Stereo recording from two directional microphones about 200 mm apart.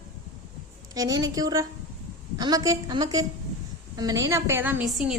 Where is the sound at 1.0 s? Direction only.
15° right (ahead or behind).